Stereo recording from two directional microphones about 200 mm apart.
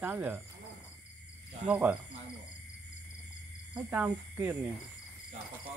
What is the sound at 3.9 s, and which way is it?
Speech, 10° right (ahead or behind).